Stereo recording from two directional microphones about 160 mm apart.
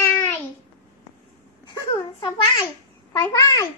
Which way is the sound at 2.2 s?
30° left (ahead or behind).